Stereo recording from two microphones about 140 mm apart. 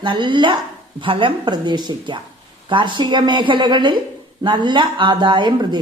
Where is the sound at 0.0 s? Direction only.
35° right (ahead or behind).